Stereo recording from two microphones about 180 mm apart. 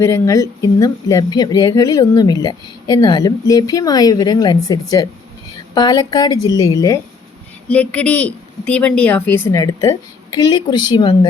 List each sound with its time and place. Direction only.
0.0 s speech: 15° left (ahead or behind)
7.7 s speech: 5° left (ahead or behind); by 11.3 s 25° left (ahead or behind)